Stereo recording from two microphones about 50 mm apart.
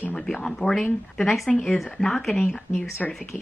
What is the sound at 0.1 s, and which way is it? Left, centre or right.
Speech, centre.